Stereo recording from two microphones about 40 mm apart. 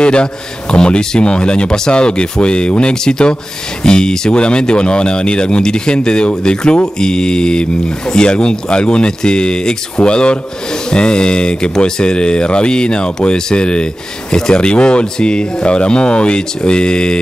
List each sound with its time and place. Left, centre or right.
0.0 s speech: left